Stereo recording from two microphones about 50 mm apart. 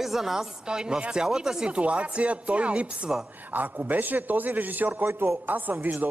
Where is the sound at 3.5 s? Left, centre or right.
Right.